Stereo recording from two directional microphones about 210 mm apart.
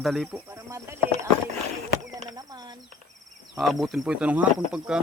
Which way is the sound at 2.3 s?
20° right (ahead or behind).